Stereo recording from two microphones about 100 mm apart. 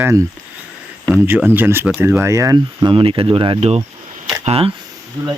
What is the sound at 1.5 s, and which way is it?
Speech, 20° right (ahead or behind).